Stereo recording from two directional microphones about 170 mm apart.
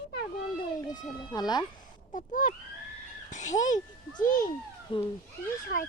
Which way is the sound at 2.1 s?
50° left (ahead or behind).